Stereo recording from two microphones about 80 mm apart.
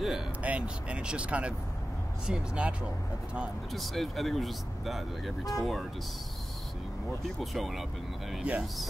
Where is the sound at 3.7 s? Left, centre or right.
Centre.